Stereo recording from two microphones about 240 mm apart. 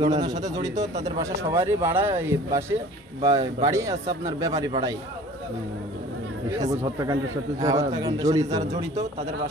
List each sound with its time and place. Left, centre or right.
0.0 s speech: centre
7.6 s speech: centre